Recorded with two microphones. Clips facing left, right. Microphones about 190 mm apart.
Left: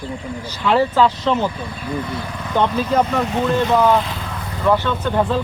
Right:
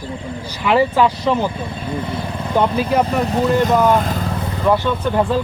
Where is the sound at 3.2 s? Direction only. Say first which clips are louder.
Right 2 dB; 35° right (ahead or behind).